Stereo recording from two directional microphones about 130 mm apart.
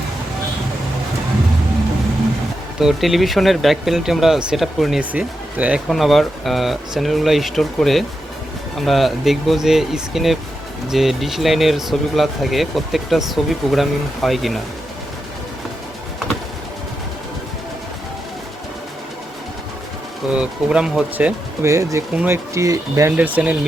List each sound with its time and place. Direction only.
2.8 s speech: centre (ahead or behind)
5.9 s speech: centre (ahead or behind)
20.3 s speech: 10° right (ahead or behind)
21.7 s speech: 25° right (ahead or behind)
22.1 s speech: 10° right (ahead or behind)
22.5 s speech: 25° right (ahead or behind)
23.1 s speech: 10° right (ahead or behind)